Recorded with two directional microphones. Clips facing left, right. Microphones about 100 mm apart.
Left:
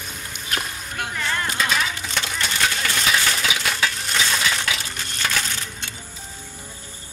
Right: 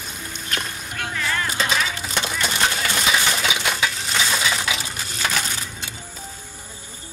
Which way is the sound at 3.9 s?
5° right (ahead or behind).